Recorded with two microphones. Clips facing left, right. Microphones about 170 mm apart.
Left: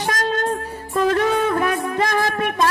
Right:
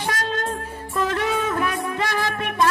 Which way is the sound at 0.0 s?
40° left (ahead or behind).